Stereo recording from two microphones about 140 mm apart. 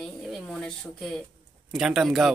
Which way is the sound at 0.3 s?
5° left (ahead or behind).